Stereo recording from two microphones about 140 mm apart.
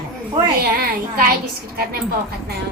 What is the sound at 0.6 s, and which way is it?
Speech, 90° right.